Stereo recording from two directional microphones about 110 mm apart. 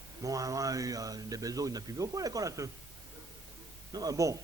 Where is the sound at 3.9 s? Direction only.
35° right (ahead or behind).